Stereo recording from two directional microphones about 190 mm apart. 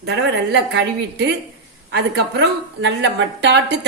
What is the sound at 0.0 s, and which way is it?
A woman's voice, 65° right (ahead or behind).